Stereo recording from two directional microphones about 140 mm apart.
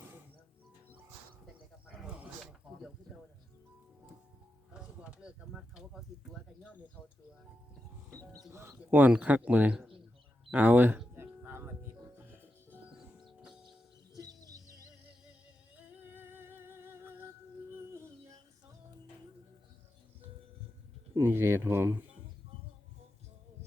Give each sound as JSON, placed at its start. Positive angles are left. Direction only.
{"t": 2.0, "sound": "a sound", "side_deg": -10}
{"t": 4.7, "sound": "a sound", "side_deg": -5}
{"t": 8.5, "sound": "speech", "side_deg": -15}
{"t": 11.1, "sound": "music", "side_deg": -15}
{"t": 13.4, "sound": "music", "side_deg": -5}
{"t": 14.2, "sound": "bird", "side_deg": -25}
{"t": 16.0, "sound": "music", "side_deg": -15}
{"t": 21.2, "sound": "speech", "side_deg": -15}